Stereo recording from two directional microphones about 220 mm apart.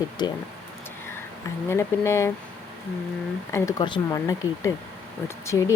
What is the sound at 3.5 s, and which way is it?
A woman's voice, 15° left (ahead or behind).